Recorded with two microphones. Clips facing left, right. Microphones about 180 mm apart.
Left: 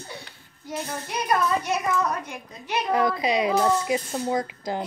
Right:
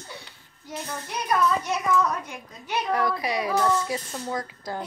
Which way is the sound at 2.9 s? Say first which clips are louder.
Left 4 dB; 20° left (ahead or behind).